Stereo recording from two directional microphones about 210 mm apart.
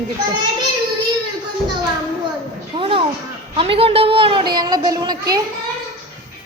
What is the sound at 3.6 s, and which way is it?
A woman's voice, 25° right (ahead or behind).